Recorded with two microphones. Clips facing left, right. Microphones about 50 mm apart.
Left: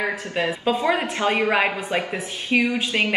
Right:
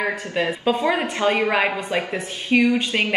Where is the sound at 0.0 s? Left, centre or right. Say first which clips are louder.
Right 1 dB; centre.